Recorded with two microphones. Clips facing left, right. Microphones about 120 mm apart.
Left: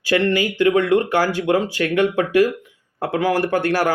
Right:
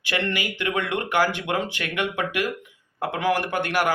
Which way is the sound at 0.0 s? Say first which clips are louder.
Left 9 dB; 35° left (ahead or behind).